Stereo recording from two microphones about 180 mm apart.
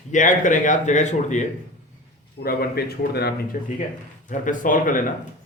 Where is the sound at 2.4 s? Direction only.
55° left (ahead or behind).